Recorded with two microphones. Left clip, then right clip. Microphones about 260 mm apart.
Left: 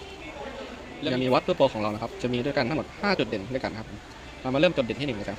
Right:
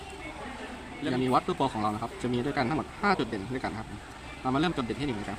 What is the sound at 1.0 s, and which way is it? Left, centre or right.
Speech, centre.